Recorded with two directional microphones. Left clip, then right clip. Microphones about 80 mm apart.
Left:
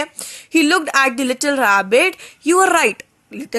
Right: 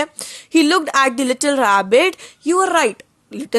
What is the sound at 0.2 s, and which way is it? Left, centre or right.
A woman's voice, right.